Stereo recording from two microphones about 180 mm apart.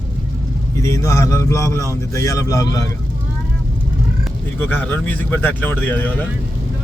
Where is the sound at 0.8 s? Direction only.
15° left (ahead or behind).